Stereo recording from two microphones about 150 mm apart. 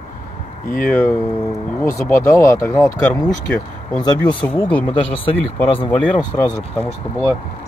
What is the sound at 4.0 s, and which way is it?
Speech, 25° left (ahead or behind).